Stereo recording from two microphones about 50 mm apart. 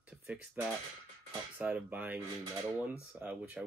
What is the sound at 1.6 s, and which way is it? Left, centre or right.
Speech, right.